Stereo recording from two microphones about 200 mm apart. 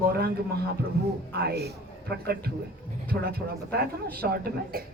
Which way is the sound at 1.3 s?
55° right (ahead or behind).